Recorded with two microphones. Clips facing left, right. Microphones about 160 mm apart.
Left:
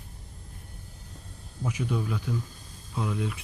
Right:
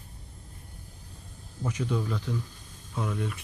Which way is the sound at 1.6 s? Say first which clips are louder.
Even; 10° left (ahead or behind).